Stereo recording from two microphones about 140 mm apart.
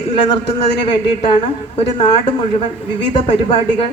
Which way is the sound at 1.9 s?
30° left (ahead or behind).